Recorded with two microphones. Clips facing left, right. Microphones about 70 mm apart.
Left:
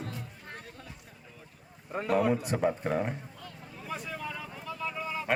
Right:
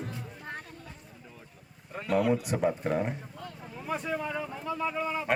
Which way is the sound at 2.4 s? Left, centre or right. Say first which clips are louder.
Right 1 dB; centre.